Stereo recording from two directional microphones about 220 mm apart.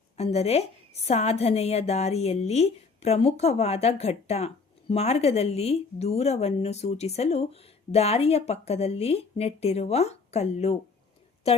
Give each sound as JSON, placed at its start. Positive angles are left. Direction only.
{"t": 0.2, "sound": "a woman's voice", "side_deg": 30}